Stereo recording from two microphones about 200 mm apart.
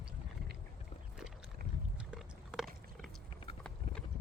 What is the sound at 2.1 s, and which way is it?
Biting, 5° right (ahead or behind).